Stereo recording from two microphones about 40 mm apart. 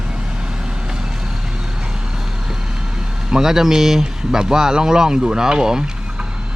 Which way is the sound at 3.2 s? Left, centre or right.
Centre.